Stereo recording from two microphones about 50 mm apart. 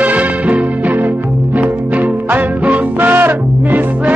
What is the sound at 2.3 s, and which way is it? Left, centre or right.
Music, right.